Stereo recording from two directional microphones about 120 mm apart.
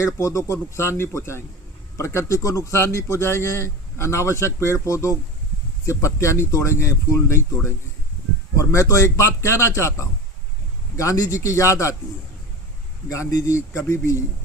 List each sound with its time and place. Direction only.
0.0 s a man's voice: 25° left (ahead or behind)
13.1 s a man's voice: 25° left (ahead or behind)